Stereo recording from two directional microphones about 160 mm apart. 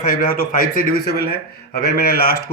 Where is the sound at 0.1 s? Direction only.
70° left (ahead or behind).